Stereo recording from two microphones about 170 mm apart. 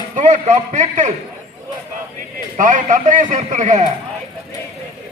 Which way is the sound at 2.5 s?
45° right (ahead or behind).